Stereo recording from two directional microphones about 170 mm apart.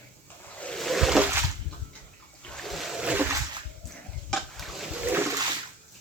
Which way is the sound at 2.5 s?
Centre (ahead or behind).